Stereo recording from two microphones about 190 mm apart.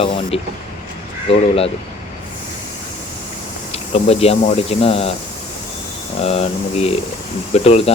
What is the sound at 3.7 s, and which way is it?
Speech, 30° left (ahead or behind).